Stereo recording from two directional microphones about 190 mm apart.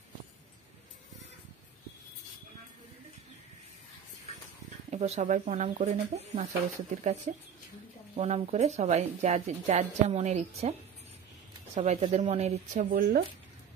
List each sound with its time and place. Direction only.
4.9 s speech: 35° right (ahead or behind)
11.7 s speech: 35° right (ahead or behind)
12.9 s speech: 50° right (ahead or behind)